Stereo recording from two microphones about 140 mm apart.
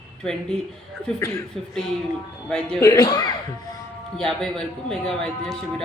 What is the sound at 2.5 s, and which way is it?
Speech, 5° left (ahead or behind).